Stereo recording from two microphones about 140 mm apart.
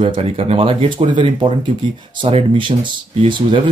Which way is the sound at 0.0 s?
40° right (ahead or behind).